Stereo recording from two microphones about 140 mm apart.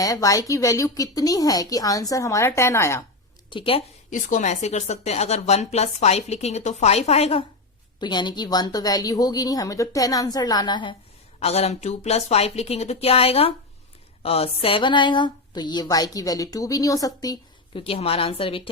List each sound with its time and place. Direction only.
0.0 s speech: 25° left (ahead or behind)
3.5 s a woman's voice: 40° left (ahead or behind)
4.1 s a woman's voice: 65° left (ahead or behind); by 7.4 s 45° left (ahead or behind)
8.0 s speech: 30° left (ahead or behind)
11.3 s a woman's voice: 50° left (ahead or behind); by 17.3 s 25° left (ahead or behind)
17.7 s a woman's voice: 45° left (ahead or behind)